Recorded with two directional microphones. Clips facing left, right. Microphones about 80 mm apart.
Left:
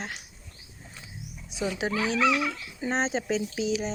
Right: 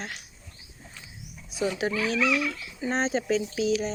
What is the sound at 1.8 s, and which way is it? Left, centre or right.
Speech, left.